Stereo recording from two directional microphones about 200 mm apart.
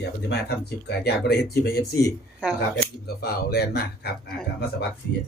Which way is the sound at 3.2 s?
50° left (ahead or behind).